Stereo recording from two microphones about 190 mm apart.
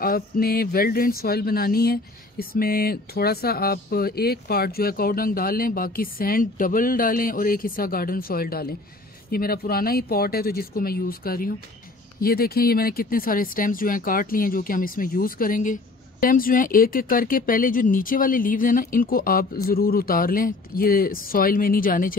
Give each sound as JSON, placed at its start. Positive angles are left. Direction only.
{"t": 0.0, "sound": "speech", "side_deg": 50}